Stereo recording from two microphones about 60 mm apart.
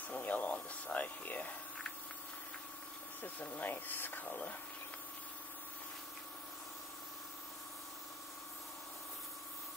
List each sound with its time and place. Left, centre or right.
0.1 s speech: left
3.3 s speech: left